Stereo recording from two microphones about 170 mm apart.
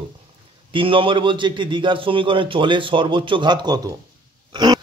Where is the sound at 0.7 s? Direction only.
30° right (ahead or behind).